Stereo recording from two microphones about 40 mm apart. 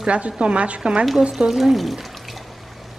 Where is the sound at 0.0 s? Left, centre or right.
Right.